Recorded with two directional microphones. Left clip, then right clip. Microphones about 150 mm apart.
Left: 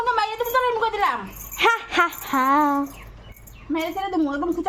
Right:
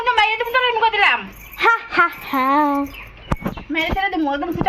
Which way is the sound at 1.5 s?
25° left (ahead or behind).